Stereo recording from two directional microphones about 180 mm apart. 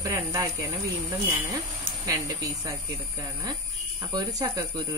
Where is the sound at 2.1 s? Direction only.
20° right (ahead or behind).